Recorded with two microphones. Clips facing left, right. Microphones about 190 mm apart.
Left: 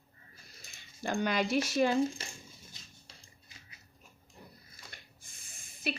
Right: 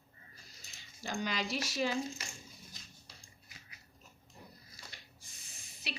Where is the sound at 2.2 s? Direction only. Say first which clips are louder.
Left 3 dB; 30° left (ahead or behind).